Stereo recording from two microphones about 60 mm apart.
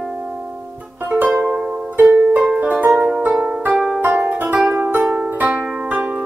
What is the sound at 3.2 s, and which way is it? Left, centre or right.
Music, right.